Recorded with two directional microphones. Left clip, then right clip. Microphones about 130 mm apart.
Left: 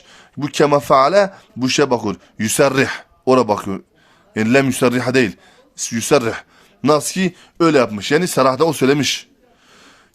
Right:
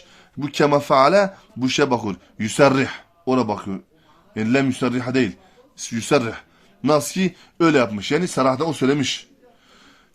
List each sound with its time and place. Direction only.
0.1 s a man's voice: 50° left (ahead or behind)
5.7 s speech: 45° left (ahead or behind)